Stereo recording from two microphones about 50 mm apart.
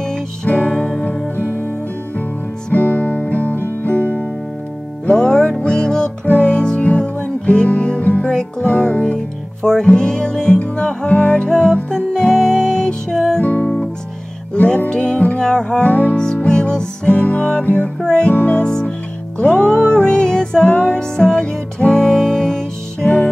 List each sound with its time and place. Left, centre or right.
0.5 s music: left
2.7 s music: left
5.1 s music: centre
6.2 s music: left
6.5 s music: centre
8.3 s music: centre
8.6 s music: left; by 13.4 s centre
13.4 s music: left
14.9 s music: left
15.8 s music: left
16.4 s music: centre
20.7 s music: left
21.3 s music: centre